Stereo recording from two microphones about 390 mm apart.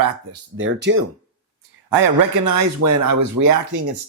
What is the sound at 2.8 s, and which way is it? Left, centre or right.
Speech, right.